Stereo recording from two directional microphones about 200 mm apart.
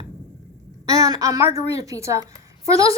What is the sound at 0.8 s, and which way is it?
A woman's voice, 20° right (ahead or behind).